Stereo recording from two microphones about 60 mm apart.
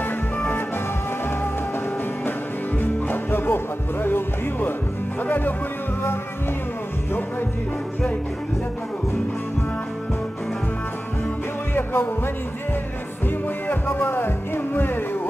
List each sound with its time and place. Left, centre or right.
2.8 s music: left
11.7 s music: left
13.7 s music: left